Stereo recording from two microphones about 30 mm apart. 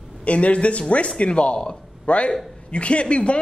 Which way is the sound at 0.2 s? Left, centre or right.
Left.